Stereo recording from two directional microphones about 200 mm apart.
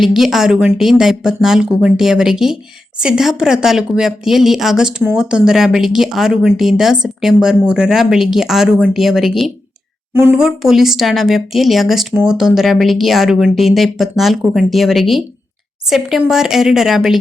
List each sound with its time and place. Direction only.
0.0 s speech: centre (ahead or behind)